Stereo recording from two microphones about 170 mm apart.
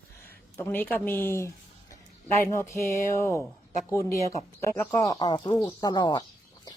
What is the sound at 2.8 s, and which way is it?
A woman's voice, 15° left (ahead or behind).